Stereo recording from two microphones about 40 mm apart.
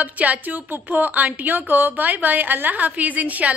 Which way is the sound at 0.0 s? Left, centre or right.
Right.